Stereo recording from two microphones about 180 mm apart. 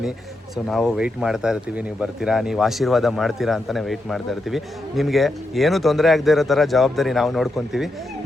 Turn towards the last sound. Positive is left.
turn(degrees=0)  # may be behind; listen again after turning